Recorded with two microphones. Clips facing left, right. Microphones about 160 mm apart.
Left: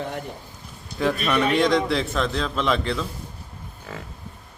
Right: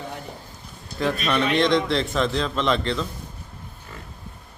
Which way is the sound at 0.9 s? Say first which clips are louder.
Left 1 dB; 10° left (ahead or behind).